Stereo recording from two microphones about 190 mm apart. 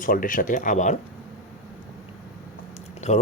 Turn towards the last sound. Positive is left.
turn(degrees=35)  # may be behind; listen again after turning